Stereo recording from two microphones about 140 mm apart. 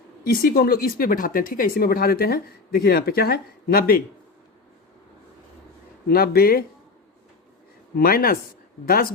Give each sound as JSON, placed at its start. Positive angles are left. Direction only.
{"t": 0.3, "sound": "speech", "side_deg": 90}
{"t": 6.1, "sound": "speech", "side_deg": 90}
{"t": 7.9, "sound": "speech", "side_deg": 90}